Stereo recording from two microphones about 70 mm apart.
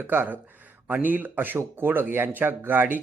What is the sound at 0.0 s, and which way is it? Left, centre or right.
Speech, right.